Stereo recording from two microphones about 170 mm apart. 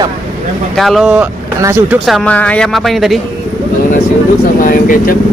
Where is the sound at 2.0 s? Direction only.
5° left (ahead or behind).